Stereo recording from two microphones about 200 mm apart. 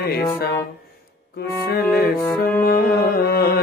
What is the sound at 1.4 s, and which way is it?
Music, 50° left (ahead or behind).